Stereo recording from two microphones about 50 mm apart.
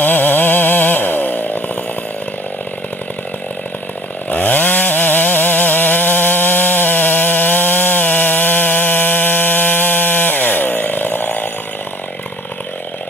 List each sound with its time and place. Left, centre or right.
0.0 s chainsaw: left
4.3 s chainsaw: left